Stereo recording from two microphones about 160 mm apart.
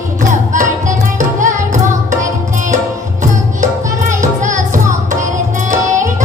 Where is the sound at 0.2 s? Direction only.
50° right (ahead or behind).